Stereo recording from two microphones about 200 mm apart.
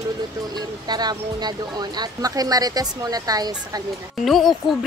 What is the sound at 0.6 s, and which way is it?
Speech, 20° right (ahead or behind).